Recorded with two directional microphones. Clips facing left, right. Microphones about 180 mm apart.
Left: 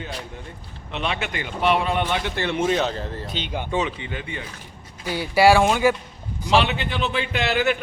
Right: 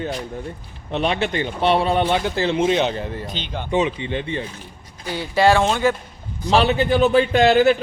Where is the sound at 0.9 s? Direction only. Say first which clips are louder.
Right 6 dB; 35° right (ahead or behind).